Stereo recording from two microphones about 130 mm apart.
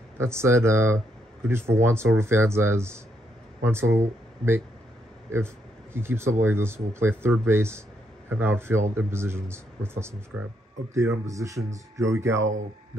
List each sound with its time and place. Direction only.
0.2 s speech: 20° right (ahead or behind)
5.9 s speech: 20° right (ahead or behind)